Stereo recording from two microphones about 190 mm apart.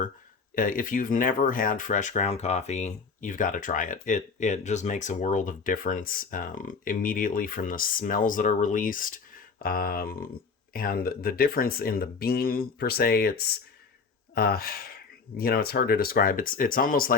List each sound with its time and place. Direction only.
0.5 s speech: 45° left (ahead or behind)